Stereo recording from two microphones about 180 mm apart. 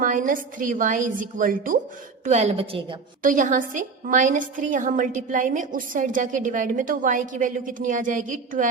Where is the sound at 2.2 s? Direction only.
40° right (ahead or behind).